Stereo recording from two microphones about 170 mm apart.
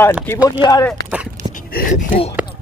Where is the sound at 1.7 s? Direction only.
55° left (ahead or behind).